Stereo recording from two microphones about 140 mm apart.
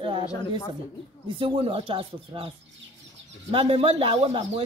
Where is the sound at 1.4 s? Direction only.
40° right (ahead or behind).